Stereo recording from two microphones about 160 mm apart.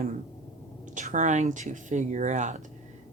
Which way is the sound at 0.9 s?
50° right (ahead or behind).